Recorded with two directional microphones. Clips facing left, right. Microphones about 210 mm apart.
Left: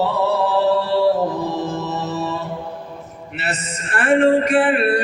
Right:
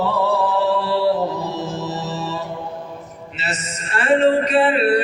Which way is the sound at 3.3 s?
55° left (ahead or behind).